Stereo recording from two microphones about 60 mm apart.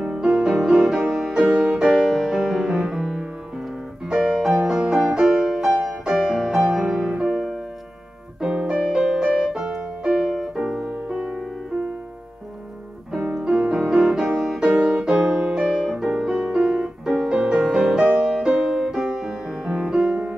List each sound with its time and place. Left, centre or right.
0.0 s music: centre
8.4 s piano: centre
8.8 s music: centre
10.9 s music: centre
13.3 s music: centre